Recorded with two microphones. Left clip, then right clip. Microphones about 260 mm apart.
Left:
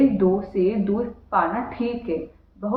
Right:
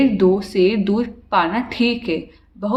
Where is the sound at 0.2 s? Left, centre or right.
Right.